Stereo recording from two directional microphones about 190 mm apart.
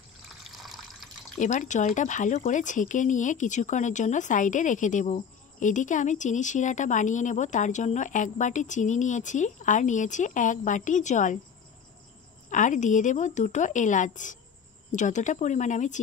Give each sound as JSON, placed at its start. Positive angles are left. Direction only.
{"t": 0.4, "sound": "water", "side_deg": 0}
{"t": 1.4, "sound": "speech", "side_deg": 40}
{"t": 12.4, "sound": "speech", "side_deg": 40}